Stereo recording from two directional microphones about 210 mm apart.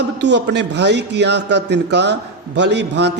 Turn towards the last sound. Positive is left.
turn(degrees=-55)  # may be behind; listen again after turning